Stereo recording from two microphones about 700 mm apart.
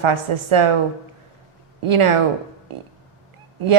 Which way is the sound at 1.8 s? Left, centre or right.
Right.